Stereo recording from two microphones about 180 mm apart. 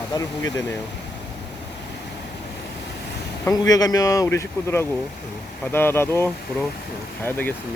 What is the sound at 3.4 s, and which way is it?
Speech, 20° left (ahead or behind).